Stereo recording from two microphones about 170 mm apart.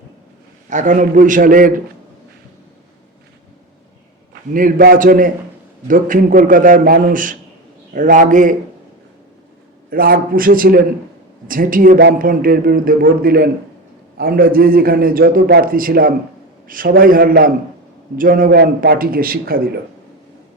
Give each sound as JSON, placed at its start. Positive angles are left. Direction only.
{"t": 0.7, "sound": "a man's voice", "side_deg": -45}
{"t": 4.5, "sound": "a man's voice", "side_deg": -55}
{"t": 9.9, "sound": "a man's voice", "side_deg": -60}